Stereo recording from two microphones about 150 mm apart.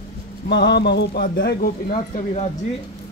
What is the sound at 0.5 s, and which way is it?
Speech, 90° left.